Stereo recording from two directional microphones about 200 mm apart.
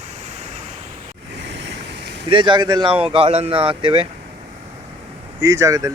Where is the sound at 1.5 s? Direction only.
60° right (ahead or behind).